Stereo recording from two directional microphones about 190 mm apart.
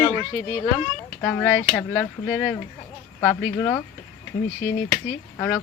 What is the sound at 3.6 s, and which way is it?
Speech, 10° left (ahead or behind).